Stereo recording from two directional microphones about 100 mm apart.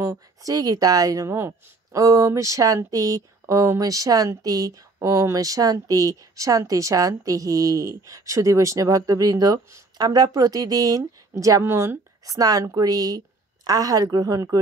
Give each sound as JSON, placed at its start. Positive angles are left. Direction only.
{"t": 0.0, "sound": "speech", "side_deg": -35}
{"t": 12.4, "sound": "speech", "side_deg": -35}